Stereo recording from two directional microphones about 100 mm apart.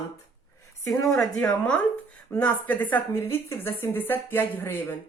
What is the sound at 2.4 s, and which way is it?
A woman's voice, 15° left (ahead or behind).